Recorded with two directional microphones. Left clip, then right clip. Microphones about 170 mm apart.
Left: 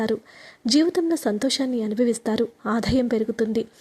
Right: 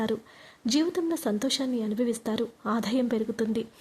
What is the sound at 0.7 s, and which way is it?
A woman's voice, 25° left (ahead or behind).